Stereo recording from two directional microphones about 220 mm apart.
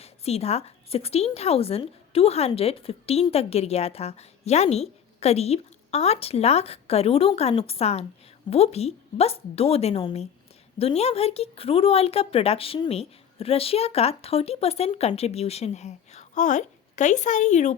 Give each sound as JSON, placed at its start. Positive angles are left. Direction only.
{"t": 0.0, "sound": "a woman's voice", "side_deg": 30}